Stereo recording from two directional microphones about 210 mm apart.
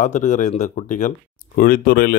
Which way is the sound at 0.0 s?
35° left (ahead or behind).